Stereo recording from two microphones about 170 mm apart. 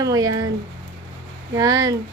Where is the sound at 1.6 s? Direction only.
20° right (ahead or behind).